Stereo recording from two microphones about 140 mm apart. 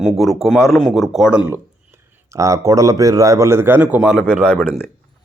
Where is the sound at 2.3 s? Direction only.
20° right (ahead or behind); by 4.3 s 5° right (ahead or behind).